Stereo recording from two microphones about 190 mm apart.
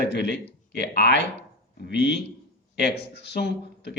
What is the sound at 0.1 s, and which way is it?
Speech, 65° left (ahead or behind).